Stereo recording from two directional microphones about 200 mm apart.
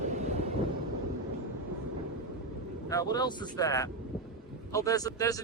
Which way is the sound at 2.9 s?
20° left (ahead or behind).